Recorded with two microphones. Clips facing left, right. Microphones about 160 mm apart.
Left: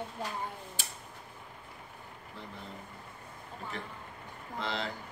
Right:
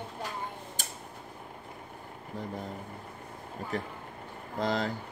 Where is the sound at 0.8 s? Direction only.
45° right (ahead or behind).